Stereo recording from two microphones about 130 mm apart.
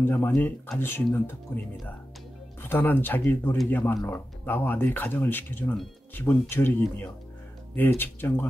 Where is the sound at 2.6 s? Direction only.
15° left (ahead or behind).